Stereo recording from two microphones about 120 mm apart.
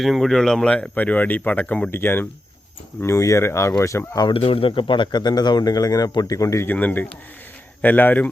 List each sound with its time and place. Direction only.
0.0 s speech: centre (ahead or behind); by 4.3 s 25° left (ahead or behind)
4.3 s speech: 50° left (ahead or behind); by 8.3 s 15° left (ahead or behind)